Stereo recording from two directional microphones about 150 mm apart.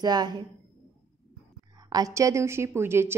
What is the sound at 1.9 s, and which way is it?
A woman's voice, 25° right (ahead or behind).